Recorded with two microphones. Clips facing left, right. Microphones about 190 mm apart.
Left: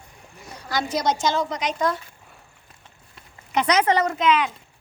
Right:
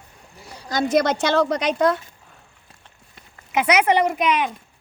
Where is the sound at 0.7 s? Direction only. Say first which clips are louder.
Right 5 dB; 60° right (ahead or behind).